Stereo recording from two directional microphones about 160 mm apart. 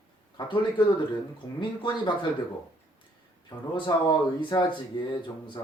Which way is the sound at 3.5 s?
30° left (ahead or behind).